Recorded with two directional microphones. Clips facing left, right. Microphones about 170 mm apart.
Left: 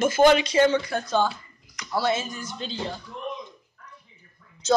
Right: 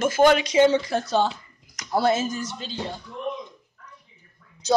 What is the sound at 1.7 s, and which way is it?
Speech, 45° right (ahead or behind).